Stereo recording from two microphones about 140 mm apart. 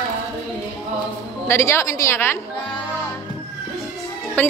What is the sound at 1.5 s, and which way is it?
Speech, 20° left (ahead or behind).